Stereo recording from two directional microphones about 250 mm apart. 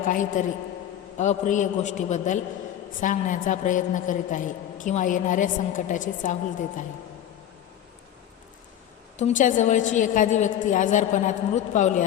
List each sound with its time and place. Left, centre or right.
0.0 s a woman's voice: left
9.1 s a woman's voice: left